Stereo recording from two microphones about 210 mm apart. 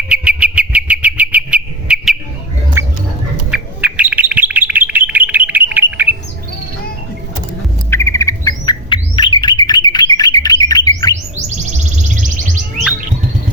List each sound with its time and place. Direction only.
0.1 s a sound: 5° right (ahead or behind)
2.8 s rodents: 15° right (ahead or behind)
3.5 s bird: 5° right (ahead or behind)
7.9 s bird: 15° left (ahead or behind)